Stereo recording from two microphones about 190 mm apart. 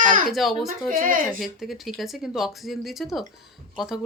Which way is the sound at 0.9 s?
45° right (ahead or behind).